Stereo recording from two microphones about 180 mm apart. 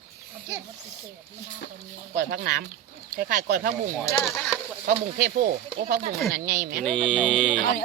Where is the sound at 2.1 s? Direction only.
55° right (ahead or behind).